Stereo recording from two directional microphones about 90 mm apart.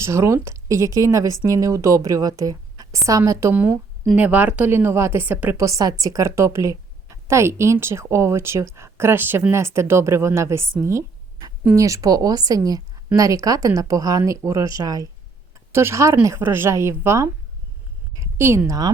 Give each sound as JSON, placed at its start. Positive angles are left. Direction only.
{"t": 0.0, "sound": "a woman's voice", "side_deg": -30}
{"t": 4.1, "sound": "a woman's voice", "side_deg": -15}
{"t": 5.5, "sound": "a woman's voice", "side_deg": -35}
{"t": 15.7, "sound": "a woman's voice", "side_deg": -30}